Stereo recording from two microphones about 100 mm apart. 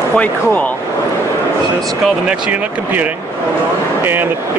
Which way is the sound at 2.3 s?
10° right (ahead or behind).